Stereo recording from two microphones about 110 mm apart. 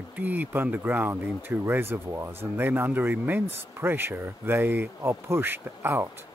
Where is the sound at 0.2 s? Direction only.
15° right (ahead or behind).